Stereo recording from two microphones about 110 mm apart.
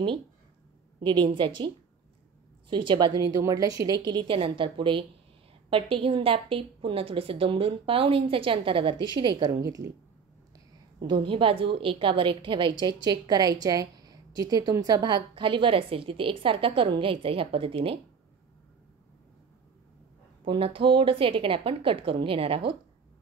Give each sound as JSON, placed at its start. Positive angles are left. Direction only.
{"t": 1.0, "sound": "a woman's voice", "side_deg": -45}
{"t": 2.7, "sound": "a woman's voice", "side_deg": -45}
{"t": 9.5, "sound": "a woman's voice", "side_deg": -30}
{"t": 11.0, "sound": "a woman's voice", "side_deg": -50}
{"t": 20.4, "sound": "a woman's voice", "side_deg": -55}